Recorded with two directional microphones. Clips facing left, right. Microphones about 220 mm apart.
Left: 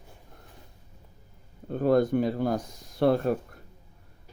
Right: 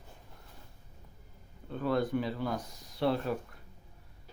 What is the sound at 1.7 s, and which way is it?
Speech, 45° left (ahead or behind).